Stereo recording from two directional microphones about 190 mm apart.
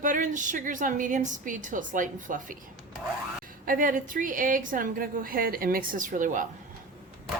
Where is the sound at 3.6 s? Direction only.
45° right (ahead or behind).